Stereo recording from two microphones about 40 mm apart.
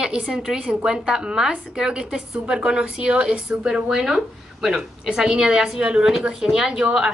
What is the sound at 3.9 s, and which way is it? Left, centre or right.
A woman's voice, centre.